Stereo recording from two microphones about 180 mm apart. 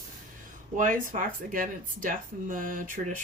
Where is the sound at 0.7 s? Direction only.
45° right (ahead or behind).